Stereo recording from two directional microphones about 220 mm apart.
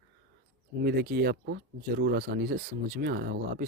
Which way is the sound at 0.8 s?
45° right (ahead or behind).